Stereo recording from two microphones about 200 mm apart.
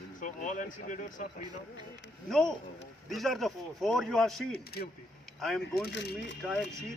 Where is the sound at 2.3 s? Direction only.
Centre (ahead or behind).